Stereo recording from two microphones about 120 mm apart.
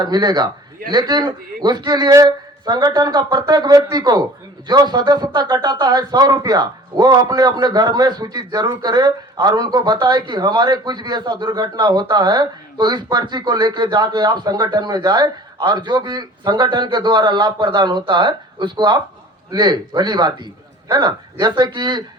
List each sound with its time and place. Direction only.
0.0 s a man's voice: 35° right (ahead or behind)